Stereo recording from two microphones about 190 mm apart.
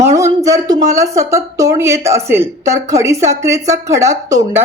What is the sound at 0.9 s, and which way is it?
A woman's voice, 15° right (ahead or behind).